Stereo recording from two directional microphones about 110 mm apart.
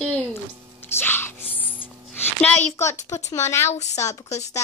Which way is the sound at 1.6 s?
55° left (ahead or behind).